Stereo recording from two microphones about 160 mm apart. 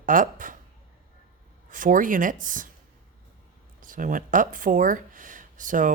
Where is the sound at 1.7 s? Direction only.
55° right (ahead or behind).